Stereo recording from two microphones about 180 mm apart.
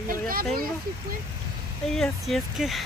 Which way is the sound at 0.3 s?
55° right (ahead or behind).